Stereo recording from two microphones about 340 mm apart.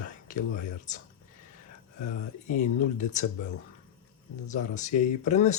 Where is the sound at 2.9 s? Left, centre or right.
Left.